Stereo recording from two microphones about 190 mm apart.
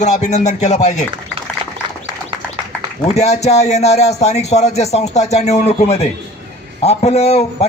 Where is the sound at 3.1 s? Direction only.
35° left (ahead or behind).